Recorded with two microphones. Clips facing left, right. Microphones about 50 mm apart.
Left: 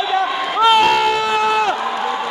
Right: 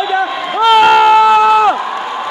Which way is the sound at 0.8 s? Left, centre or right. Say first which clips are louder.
Right 8 dB; right.